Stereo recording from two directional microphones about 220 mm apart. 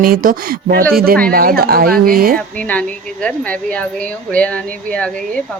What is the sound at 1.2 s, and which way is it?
Speech, 45° right (ahead or behind).